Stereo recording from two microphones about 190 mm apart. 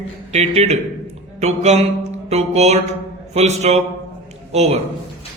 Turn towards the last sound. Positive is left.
turn(degrees=-35)  # may be behind; listen again after turning